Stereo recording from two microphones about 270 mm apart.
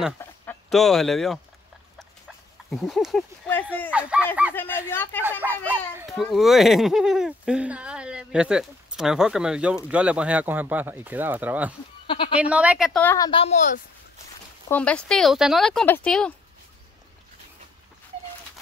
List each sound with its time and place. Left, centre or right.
0.2 s chicken: centre
2.7 s a child's voice: centre
4.6 s a woman's voice: centre
5.7 s a child's voice: centre
12.1 s bleat: centre
12.4 s a woman's voice: centre; by 13.8 s left
14.7 s a child's voice: centre